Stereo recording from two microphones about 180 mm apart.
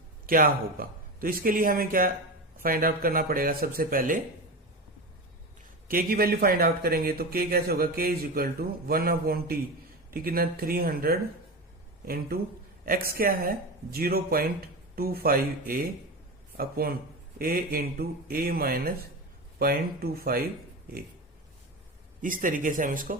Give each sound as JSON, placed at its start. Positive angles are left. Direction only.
{"t": 0.3, "sound": "a man's voice", "side_deg": -50}
{"t": 5.9, "sound": "speech", "side_deg": -55}
{"t": 22.2, "sound": "a man's voice", "side_deg": -50}